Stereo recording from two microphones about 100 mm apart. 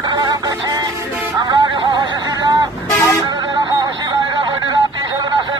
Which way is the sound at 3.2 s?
50° right (ahead or behind).